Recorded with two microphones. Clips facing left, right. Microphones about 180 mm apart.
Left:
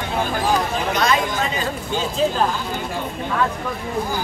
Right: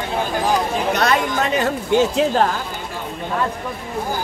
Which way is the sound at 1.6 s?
70° right (ahead or behind).